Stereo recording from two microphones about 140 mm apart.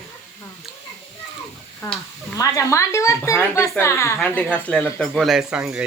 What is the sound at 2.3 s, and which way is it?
Speech, 20° left (ahead or behind).